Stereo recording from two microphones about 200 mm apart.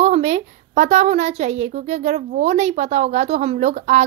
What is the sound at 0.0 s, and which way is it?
Speech, 35° right (ahead or behind).